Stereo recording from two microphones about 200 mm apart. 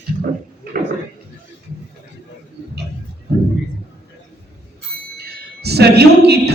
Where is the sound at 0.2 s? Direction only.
45° right (ahead or behind).